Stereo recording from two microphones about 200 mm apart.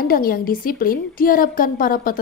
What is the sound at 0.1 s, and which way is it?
Speech, 45° left (ahead or behind).